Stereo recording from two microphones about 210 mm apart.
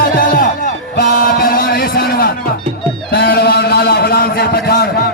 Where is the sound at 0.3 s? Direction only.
40° left (ahead or behind).